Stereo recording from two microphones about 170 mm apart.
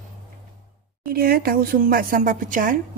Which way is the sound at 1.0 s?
60° right (ahead or behind).